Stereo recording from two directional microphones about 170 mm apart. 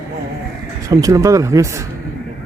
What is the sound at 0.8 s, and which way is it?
Speech, 20° right (ahead or behind).